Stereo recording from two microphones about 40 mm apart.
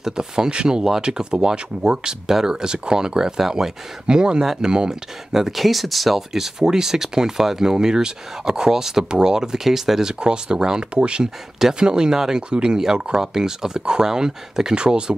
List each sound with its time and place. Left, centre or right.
0.0 s speech: centre
5.3 s speech: centre
6.3 s speech: centre
10.2 s speech: right